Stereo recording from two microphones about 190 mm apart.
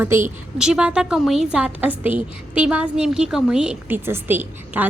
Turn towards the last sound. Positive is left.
turn(degrees=-10)  # may be behind; listen again after turning